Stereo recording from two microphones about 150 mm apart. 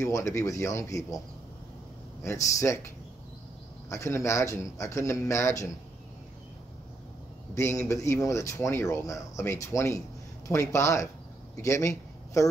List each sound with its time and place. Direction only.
0.0 s speech: 20° left (ahead or behind)
2.4 s speech: 20° left (ahead or behind)
3.9 s speech: 20° left (ahead or behind)
7.5 s speech: 20° left (ahead or behind)